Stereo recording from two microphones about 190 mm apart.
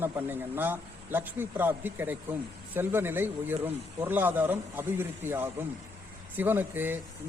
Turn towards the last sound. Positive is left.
turn(degrees=-10)  # may be behind; listen again after turning